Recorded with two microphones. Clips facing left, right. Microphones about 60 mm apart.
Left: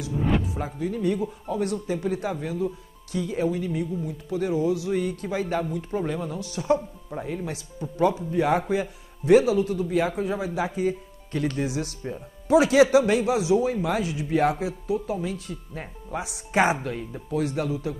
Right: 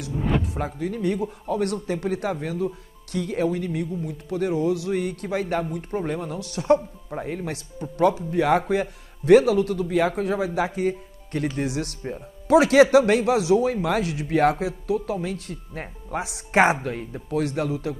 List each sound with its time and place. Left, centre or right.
0.5 s speech: right